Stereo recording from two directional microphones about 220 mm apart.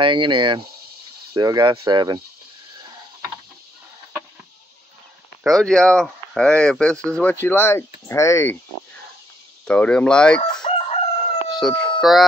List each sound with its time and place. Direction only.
0.0 s speech: 20° right (ahead or behind)
5.4 s speech: centre (ahead or behind)
9.7 s speech: 5° left (ahead or behind)
10.4 s chicken: 20° left (ahead or behind)
11.6 s a sound: centre (ahead or behind)